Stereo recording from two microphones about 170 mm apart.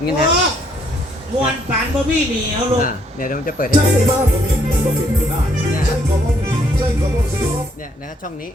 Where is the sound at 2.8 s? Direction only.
50° left (ahead or behind).